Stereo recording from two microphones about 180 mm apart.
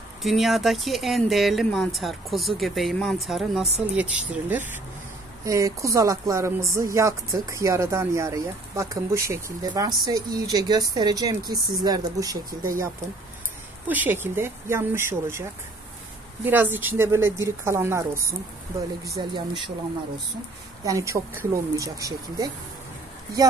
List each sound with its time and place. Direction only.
0.2 s speech: centre (ahead or behind); by 12.8 s 15° right (ahead or behind)
13.8 s speech: 10° right (ahead or behind)
20.8 s speech: 15° right (ahead or behind)